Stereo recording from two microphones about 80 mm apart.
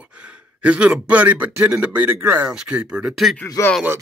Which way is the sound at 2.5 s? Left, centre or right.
Centre.